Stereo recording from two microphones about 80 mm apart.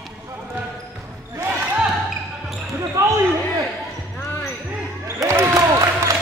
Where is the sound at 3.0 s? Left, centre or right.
Right.